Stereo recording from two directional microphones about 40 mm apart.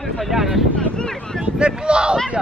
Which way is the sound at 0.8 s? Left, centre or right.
Left.